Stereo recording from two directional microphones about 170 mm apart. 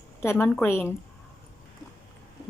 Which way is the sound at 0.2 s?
15° left (ahead or behind).